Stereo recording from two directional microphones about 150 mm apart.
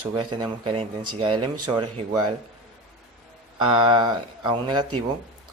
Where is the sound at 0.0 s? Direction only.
30° right (ahead or behind).